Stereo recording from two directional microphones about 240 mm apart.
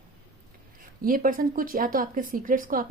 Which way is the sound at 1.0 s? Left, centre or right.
Right.